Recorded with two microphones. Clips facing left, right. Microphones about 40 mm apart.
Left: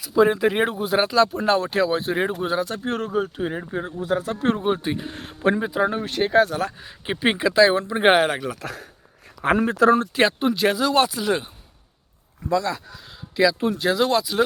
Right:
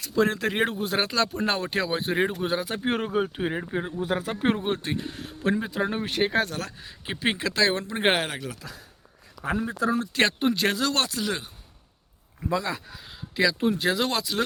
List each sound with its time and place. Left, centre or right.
0.0 s speech: centre
2.6 s speech: right
3.5 s speech: centre
4.1 s speech: right
4.5 s speech: centre
5.1 s speech: left
5.5 s speech: centre
5.9 s speech: centre
6.6 s speech: centre
8.2 s speech: left
8.6 s speech: left
9.4 s speech: left
10.2 s speech: centre
12.5 s speech: centre